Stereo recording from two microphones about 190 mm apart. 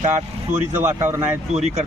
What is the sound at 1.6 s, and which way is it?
Speech, 35° right (ahead or behind).